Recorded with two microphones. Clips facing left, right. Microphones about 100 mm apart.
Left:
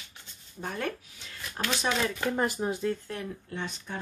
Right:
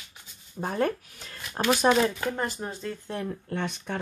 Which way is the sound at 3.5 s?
65° right (ahead or behind).